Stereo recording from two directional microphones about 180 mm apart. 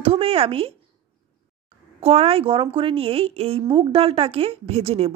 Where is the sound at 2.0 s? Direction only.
35° right (ahead or behind).